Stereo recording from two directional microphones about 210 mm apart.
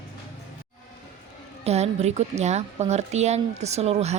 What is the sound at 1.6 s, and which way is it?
Speech, 30° right (ahead or behind).